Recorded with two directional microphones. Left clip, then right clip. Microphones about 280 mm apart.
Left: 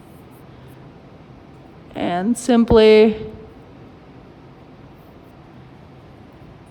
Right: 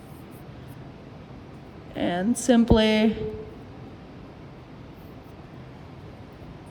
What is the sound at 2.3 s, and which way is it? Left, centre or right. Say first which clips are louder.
Speech: left 7 dB; centre.